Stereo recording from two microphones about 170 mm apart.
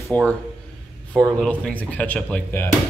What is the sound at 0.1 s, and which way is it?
Speech, 10° left (ahead or behind).